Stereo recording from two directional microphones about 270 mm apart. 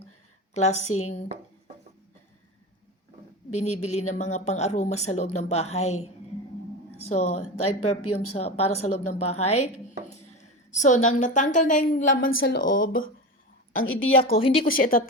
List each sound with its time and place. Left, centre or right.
0.5 s speech: left
3.5 s speech: left
7.1 s a woman's voice: left
13.8 s a woman's voice: left
14.3 s speech: left
14.7 s speech: left